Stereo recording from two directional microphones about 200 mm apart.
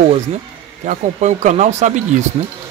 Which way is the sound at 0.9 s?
35° right (ahead or behind).